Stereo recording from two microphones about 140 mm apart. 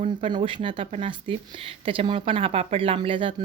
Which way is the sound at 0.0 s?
35° right (ahead or behind).